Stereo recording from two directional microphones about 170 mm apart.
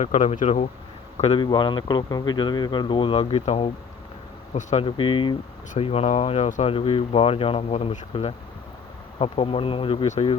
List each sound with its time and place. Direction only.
0.0 s speech: 40° left (ahead or behind)
1.2 s speech: 30° left (ahead or behind)
4.9 s speech: 30° left (ahead or behind)